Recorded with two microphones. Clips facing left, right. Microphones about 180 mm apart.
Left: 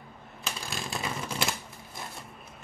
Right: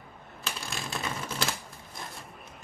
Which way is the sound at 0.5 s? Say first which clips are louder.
Left 1 dB; centre (ahead or behind).